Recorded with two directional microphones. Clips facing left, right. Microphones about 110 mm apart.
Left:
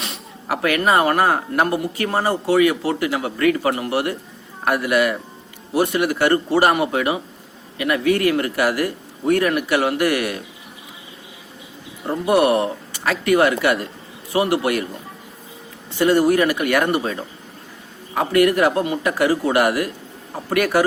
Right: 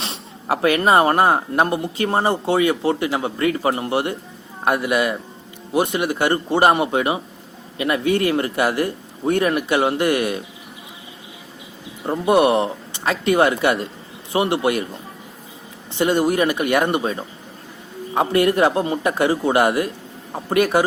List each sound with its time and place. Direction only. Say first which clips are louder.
0.0 s speech: right 1 dB; 30° right (ahead or behind)
12.0 s speech: right 1 dB; 20° right (ahead or behind)
15.9 s speech: left 2 dB; 20° right (ahead or behind)